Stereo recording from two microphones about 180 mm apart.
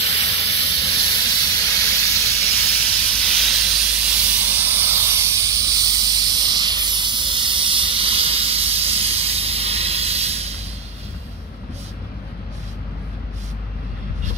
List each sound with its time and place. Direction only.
0.0 s hiss: 30° left (ahead or behind)
0.8 s steam: 20° left (ahead or behind)
2.4 s hiss: 5° left (ahead or behind); by 10.5 s 35° right (ahead or behind)